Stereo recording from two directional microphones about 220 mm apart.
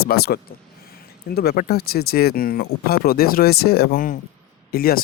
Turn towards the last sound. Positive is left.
turn(degrees=40)  # may be behind; listen again after turning